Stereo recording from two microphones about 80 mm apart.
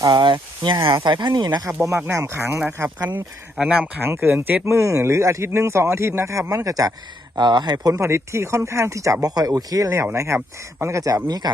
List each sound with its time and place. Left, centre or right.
0.1 s speech: right
1.0 s speech: right
1.5 s speech: right
6.7 s speech: right
7.3 s speech: right
7.9 s speech: right
9.2 s speech: right